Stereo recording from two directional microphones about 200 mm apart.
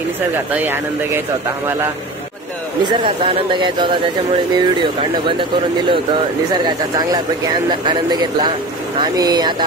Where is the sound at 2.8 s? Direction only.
25° right (ahead or behind).